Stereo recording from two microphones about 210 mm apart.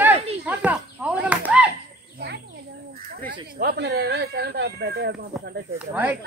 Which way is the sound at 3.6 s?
50° right (ahead or behind).